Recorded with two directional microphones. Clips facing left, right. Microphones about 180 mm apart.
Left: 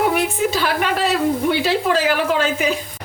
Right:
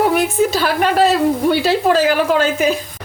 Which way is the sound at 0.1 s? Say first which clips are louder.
Right 4 dB; 40° right (ahead or behind).